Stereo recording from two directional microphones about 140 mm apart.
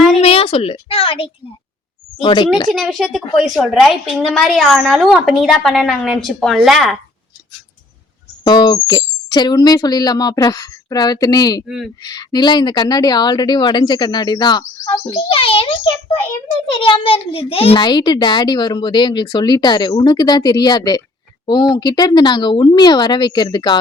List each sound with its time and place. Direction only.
0.2 s a sound: 45° left (ahead or behind)
2.2 s a child's voice: 35° left (ahead or behind)
2.6 s a woman's voice: centre (ahead or behind)
8.4 s a child's voice: 30° left (ahead or behind)